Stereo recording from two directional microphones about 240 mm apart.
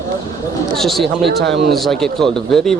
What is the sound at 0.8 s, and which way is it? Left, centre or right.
A man's voice, centre.